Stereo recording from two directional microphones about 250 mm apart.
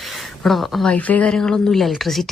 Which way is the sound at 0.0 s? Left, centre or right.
Centre.